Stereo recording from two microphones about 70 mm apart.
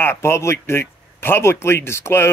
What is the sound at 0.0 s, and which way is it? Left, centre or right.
Speech, left.